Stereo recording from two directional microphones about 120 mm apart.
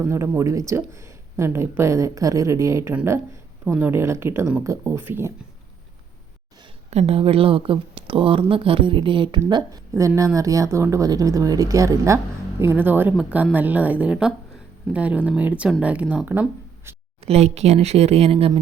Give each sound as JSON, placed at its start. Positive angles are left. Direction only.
{"t": 0.0, "sound": "a woman's voice", "side_deg": -25}
{"t": 6.9, "sound": "a woman's voice", "side_deg": -60}
{"t": 17.2, "sound": "speech", "side_deg": -65}